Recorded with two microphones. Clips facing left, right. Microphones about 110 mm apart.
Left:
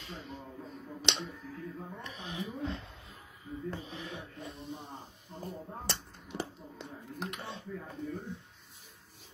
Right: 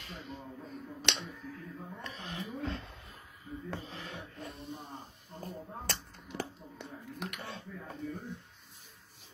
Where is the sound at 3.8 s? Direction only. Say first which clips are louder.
Left 2 dB; 15° left (ahead or behind).